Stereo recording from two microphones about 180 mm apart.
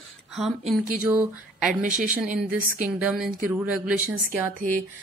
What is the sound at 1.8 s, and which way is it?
Speech, 45° right (ahead or behind).